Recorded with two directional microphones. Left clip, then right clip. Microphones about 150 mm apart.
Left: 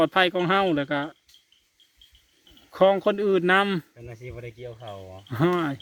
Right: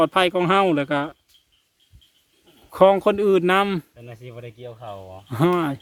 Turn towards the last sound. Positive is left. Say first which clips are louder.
# right 3 dB
turn(degrees=-15)  # may be behind; listen again after turning